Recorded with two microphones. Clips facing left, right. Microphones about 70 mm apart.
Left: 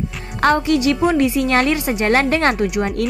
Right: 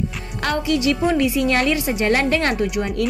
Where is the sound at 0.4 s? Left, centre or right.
Left.